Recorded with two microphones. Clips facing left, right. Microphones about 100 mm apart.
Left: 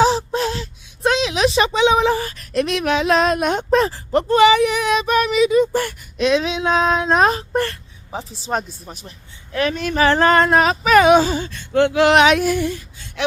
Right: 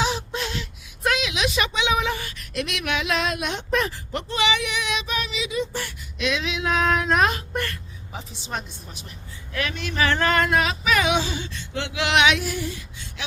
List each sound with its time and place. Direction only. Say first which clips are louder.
0.0 s speech: left 9 dB; 35° left (ahead or behind); by 13.2 s 55° left (ahead or behind)